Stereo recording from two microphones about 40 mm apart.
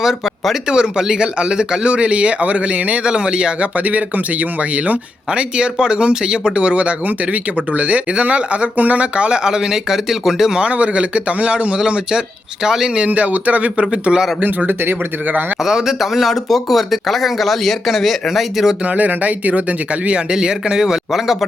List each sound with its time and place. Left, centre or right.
0.0 s a sound: centre
0.7 s speech: centre; by 3.0 s right
3.0 s speech: right
3.8 s speech: right
5.3 s speech: right
10.6 s speech: right
12.6 s speech: centre
13.1 s speech: right
13.7 s speech: right
15.6 s speech: centre
18.9 s speech: right
20.1 s speech: right